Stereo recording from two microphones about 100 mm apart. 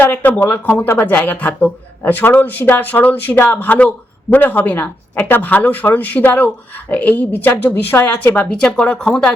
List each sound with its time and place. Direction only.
0.0 s speech: 20° left (ahead or behind)